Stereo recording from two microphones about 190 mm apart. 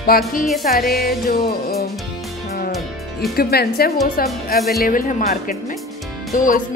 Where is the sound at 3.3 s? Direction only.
55° left (ahead or behind).